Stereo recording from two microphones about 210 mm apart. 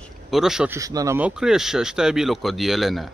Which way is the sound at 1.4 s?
Centre (ahead or behind).